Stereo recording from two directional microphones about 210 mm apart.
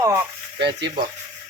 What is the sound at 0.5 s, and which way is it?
Stir, 55° right (ahead or behind).